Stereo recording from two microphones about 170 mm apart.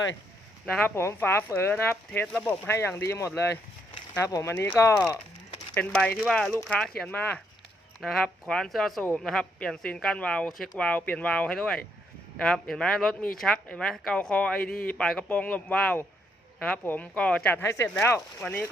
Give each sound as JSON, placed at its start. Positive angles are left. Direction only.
{"t": 0.6, "sound": "speech", "side_deg": 10}
{"t": 5.7, "sound": "speech", "side_deg": 5}